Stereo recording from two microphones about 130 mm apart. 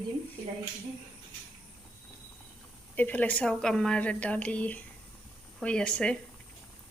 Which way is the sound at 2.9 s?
15° left (ahead or behind).